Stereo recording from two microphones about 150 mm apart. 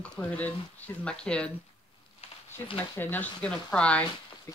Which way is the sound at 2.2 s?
40° left (ahead or behind).